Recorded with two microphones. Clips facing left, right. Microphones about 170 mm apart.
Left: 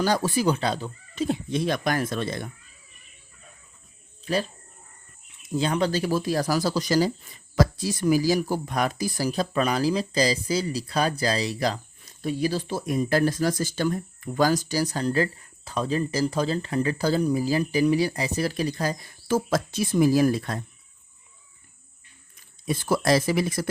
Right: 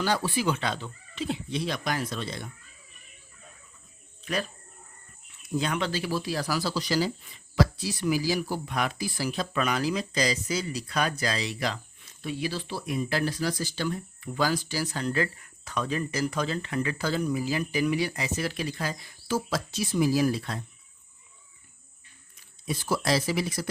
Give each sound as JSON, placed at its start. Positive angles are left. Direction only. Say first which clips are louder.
{"t": 0.0, "sound": "speech", "louder": "left 4 dB", "side_deg": 40}
{"t": 4.3, "sound": "speech", "louder": "left 5 dB", "side_deg": 35}
{"t": 22.6, "sound": "speech", "louder": "left 5 dB", "side_deg": 50}